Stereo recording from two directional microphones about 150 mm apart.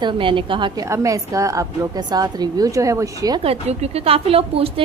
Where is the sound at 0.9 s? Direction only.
20° right (ahead or behind).